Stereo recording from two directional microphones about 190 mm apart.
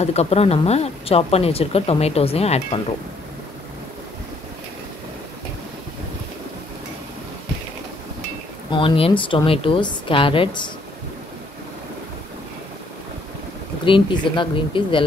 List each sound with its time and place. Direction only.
0.0 s speech: 35° left (ahead or behind)
8.6 s a woman's voice: 25° left (ahead or behind)
13.8 s a woman's voice: 25° left (ahead or behind)